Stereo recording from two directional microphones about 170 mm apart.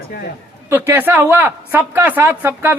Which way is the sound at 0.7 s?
15° right (ahead or behind).